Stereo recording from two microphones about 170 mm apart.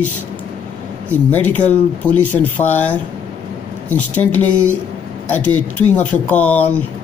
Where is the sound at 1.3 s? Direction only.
10° left (ahead or behind).